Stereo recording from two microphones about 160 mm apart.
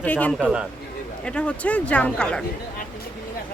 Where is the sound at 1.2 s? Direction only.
5° left (ahead or behind).